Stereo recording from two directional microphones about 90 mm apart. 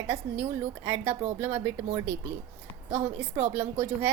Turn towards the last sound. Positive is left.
turn(degrees=-25)  # may be behind; listen again after turning